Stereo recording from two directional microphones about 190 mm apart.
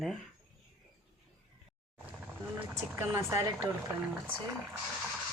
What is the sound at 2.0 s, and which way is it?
Speech, 10° right (ahead or behind).